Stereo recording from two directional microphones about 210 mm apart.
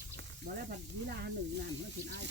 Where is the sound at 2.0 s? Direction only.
55° right (ahead or behind).